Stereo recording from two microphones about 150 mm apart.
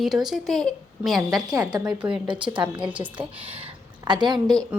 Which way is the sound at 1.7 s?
25° right (ahead or behind).